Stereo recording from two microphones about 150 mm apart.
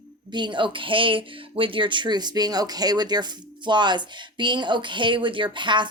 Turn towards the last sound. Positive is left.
turn(degrees=-30)  # may be behind; listen again after turning